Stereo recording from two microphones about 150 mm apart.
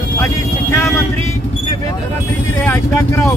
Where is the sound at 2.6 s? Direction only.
15° left (ahead or behind).